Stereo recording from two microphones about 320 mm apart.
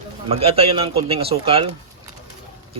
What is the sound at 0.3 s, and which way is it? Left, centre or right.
Speech, centre.